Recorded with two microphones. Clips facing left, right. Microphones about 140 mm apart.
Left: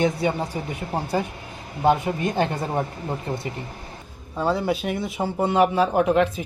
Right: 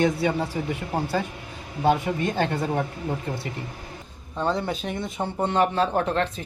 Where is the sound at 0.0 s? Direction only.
25° left (ahead or behind).